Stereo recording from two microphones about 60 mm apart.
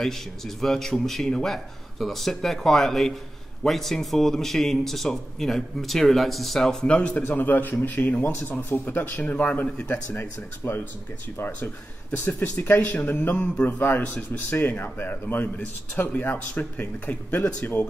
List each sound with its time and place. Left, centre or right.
0.0 s a man's voice: centre; by 7.2 s left
7.2 s a man's voice: left
11.3 s a man's voice: left